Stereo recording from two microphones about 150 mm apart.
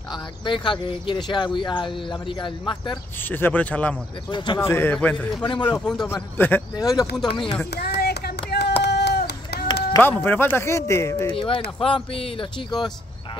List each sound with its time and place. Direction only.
0.1 s speech: 35° left (ahead or behind)
3.3 s speech: 15° left (ahead or behind)
4.3 s speech: 30° left (ahead or behind)
4.6 s speech: 15° left (ahead or behind); by 7.5 s 30° left (ahead or behind)
7.7 s a sound: 90° left
9.9 s speech: 15° left (ahead or behind)
11.3 s speech: 35° left (ahead or behind)